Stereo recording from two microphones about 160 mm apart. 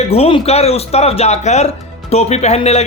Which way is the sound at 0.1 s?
35° left (ahead or behind).